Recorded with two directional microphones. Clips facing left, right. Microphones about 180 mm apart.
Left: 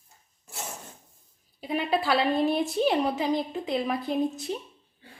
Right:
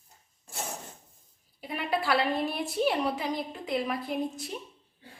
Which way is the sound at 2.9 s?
25° left (ahead or behind).